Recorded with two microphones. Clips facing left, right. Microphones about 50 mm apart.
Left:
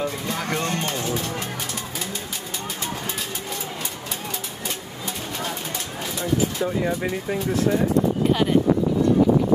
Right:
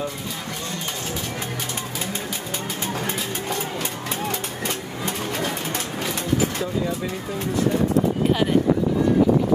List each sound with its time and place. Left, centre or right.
0.5 s music: left
6.6 s speech: left